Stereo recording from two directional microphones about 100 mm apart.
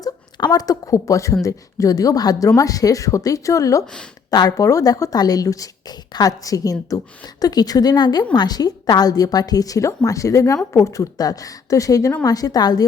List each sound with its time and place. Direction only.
0.0 s a woman's voice: 40° left (ahead or behind)